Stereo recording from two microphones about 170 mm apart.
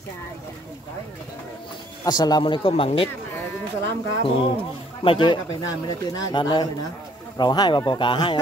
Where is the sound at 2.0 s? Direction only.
25° left (ahead or behind).